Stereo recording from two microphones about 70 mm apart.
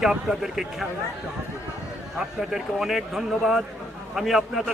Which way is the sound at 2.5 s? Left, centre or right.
Centre.